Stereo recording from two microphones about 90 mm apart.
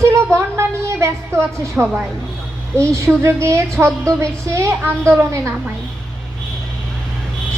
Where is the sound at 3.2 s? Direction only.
30° right (ahead or behind).